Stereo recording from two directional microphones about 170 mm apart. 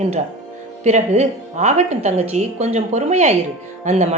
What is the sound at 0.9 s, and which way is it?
A woman's voice, 40° right (ahead or behind).